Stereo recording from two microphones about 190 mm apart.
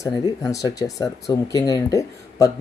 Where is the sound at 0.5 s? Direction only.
20° left (ahead or behind).